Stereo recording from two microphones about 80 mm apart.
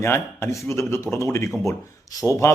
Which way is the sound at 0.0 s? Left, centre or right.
Left.